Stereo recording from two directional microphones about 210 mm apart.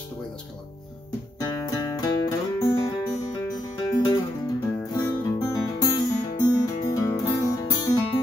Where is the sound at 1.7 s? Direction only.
15° left (ahead or behind).